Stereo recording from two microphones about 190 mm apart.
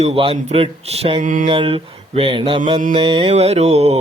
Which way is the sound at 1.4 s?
30° right (ahead or behind).